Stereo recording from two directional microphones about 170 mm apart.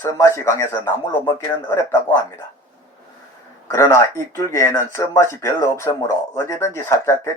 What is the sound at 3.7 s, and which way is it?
Speech, 15° left (ahead or behind).